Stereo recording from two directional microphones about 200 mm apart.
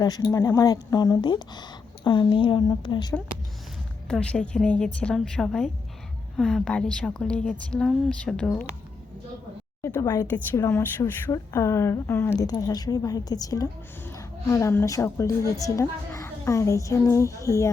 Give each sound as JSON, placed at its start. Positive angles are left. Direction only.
{"t": 0.0, "sound": "speech", "side_deg": 20}
{"t": 4.1, "sound": "a woman's voice", "side_deg": 5}
{"t": 9.8, "sound": "speech", "side_deg": 15}